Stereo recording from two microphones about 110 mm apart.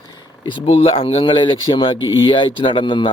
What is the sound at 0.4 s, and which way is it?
Speech, 50° left (ahead or behind).